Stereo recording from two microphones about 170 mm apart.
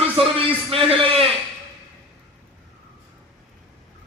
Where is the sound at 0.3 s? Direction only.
35° right (ahead or behind).